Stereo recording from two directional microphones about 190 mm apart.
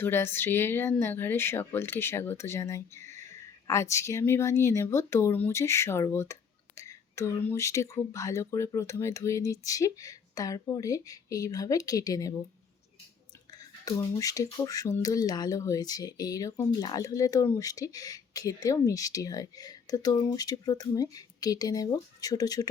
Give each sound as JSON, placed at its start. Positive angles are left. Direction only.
{"t": 0.0, "sound": "speech", "side_deg": 10}
{"t": 13.5, "sound": "speech", "side_deg": 20}